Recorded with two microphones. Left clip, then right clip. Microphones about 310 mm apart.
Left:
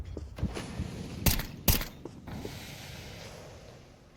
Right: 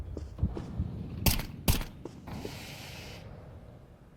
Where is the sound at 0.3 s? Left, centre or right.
Left.